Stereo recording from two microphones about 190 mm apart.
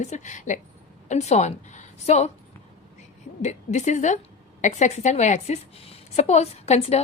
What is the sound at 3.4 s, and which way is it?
A woman's voice, 40° left (ahead or behind).